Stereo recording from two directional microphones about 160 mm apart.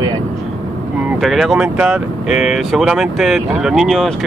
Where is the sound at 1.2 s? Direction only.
Centre (ahead or behind).